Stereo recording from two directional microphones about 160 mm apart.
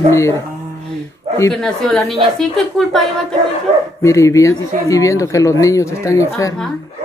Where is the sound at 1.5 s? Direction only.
Centre (ahead or behind).